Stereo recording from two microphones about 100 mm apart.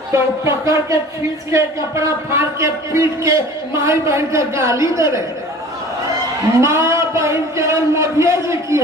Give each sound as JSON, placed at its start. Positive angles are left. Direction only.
{"t": 0.1, "sound": "a man's voice", "side_deg": -30}
{"t": 6.6, "sound": "a man's voice", "side_deg": -30}